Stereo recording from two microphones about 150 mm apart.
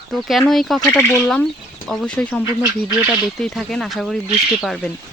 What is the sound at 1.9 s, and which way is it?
Speech, 5° left (ahead or behind).